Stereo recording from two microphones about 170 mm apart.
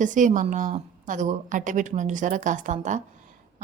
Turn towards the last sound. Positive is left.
turn(degrees=-45)  # may be behind; listen again after turning